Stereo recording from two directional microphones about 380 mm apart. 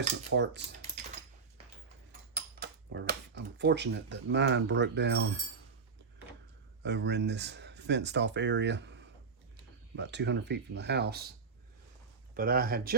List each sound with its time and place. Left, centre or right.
0.3 s speech: right
2.3 s speech: right
6.8 s speech: right
12.3 s speech: right